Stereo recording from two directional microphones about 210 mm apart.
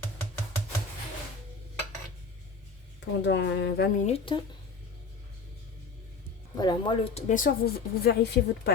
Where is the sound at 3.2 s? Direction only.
55° left (ahead or behind).